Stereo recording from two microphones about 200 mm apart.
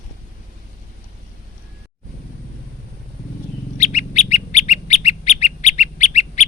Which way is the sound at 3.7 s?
35° left (ahead or behind).